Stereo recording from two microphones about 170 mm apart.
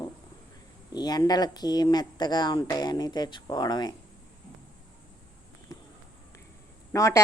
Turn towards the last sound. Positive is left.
turn(degrees=20)  # may be behind; listen again after turning